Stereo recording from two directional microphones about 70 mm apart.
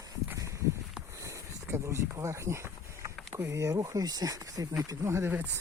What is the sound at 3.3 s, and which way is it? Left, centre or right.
Speech, right.